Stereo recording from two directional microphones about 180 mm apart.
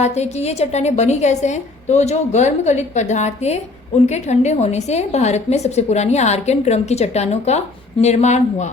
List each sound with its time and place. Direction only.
0.0 s a woman's voice: 40° left (ahead or behind)